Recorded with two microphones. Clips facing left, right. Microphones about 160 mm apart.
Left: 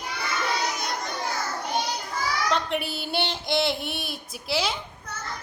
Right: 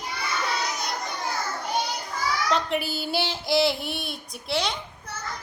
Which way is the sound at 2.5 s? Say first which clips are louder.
Right 1 dB; centre (ahead or behind).